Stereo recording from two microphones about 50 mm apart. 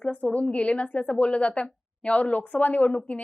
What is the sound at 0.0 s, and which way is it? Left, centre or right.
A woman's voice, left.